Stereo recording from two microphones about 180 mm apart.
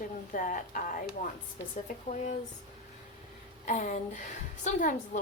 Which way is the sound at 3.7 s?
45° left (ahead or behind).